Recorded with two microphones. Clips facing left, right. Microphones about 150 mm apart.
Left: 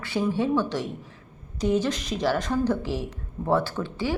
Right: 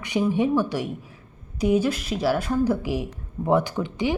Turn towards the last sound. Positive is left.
turn(degrees=-15)  # may be behind; listen again after turning